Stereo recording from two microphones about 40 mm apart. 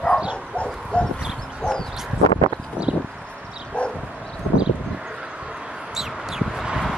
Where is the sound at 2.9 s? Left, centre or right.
Right.